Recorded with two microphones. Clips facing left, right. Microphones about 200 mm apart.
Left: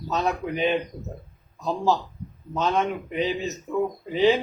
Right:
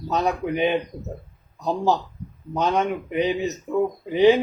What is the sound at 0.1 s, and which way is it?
Speech, 15° right (ahead or behind).